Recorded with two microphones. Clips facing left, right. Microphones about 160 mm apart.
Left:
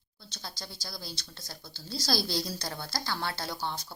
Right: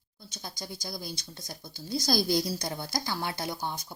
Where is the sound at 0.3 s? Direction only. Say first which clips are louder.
Right 3 dB; 15° right (ahead or behind).